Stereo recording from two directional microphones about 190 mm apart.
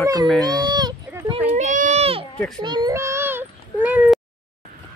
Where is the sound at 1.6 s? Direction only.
40° right (ahead or behind); by 4.2 s 10° right (ahead or behind).